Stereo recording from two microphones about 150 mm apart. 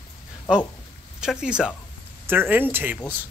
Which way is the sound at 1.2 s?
5° right (ahead or behind).